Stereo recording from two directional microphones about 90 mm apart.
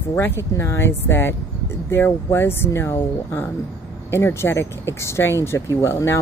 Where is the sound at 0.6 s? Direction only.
30° left (ahead or behind).